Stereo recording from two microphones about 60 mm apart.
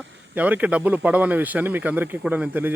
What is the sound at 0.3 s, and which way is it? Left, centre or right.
Speech, right.